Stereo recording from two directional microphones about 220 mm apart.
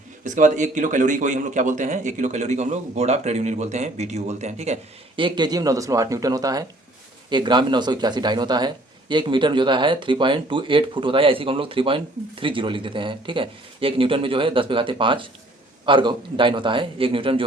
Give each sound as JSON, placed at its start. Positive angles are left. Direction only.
{"t": 0.3, "sound": "speech", "side_deg": -35}